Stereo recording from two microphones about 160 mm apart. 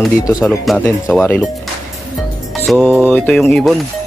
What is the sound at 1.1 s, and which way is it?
Mantra, 10° left (ahead or behind).